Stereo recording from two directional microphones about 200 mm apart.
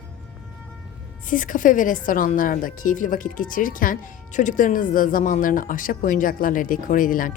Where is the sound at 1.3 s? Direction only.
40° left (ahead or behind).